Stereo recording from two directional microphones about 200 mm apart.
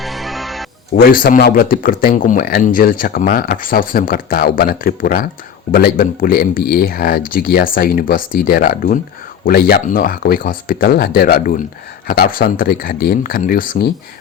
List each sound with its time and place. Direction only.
0.0 s music: centre (ahead or behind)
0.9 s speech: 45° left (ahead or behind)